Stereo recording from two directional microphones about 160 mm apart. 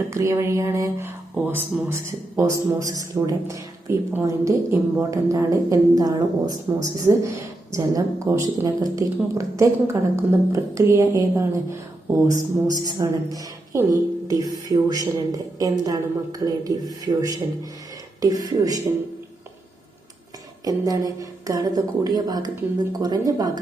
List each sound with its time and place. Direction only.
0.1 s a woman's voice: 15° right (ahead or behind)
20.7 s a woman's voice: 20° right (ahead or behind)